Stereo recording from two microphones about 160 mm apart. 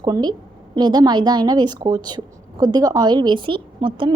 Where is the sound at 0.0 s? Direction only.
25° right (ahead or behind).